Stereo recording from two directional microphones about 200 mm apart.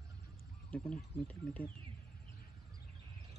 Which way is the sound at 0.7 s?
5° left (ahead or behind).